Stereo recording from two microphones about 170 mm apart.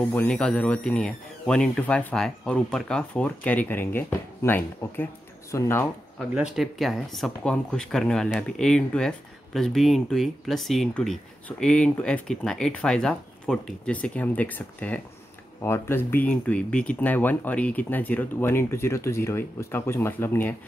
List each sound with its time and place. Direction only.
0.0 s speech: 10° left (ahead or behind)
6.1 s speech: 5° right (ahead or behind); by 20.5 s 10° left (ahead or behind)